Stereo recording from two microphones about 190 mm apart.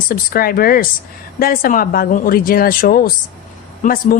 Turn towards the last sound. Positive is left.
turn(degrees=50)  # may be behind; listen again after turning